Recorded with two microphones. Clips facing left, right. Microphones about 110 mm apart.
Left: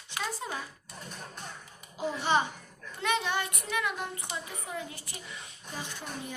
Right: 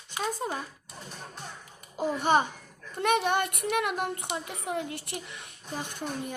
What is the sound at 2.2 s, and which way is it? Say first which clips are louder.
Speech: right 3 dB; 50° right (ahead or behind).